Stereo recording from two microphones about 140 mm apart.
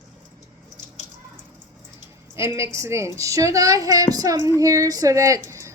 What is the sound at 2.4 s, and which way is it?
A woman's voice, 20° right (ahead or behind).